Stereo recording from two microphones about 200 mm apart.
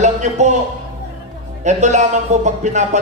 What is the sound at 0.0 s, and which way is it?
Speech, 35° right (ahead or behind).